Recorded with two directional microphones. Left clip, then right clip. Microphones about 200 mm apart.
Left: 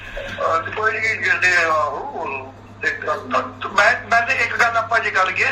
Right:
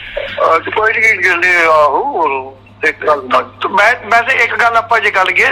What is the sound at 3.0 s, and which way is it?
A man's voice, 50° right (ahead or behind).